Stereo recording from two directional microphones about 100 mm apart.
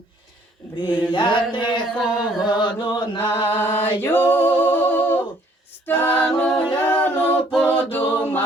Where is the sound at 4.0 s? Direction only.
20° left (ahead or behind).